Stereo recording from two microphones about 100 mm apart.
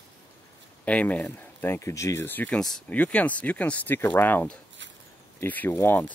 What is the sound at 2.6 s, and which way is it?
Speech, 5° left (ahead or behind).